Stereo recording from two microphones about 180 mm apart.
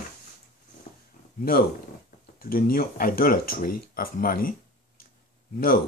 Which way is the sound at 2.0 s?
55° left (ahead or behind).